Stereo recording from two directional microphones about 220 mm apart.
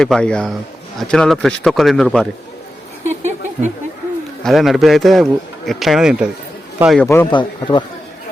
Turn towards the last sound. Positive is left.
turn(degrees=20)  # may be behind; listen again after turning